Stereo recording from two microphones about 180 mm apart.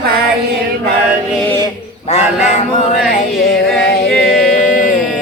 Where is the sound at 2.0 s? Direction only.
40° left (ahead or behind).